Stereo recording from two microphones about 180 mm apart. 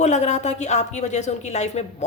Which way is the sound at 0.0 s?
40° left (ahead or behind).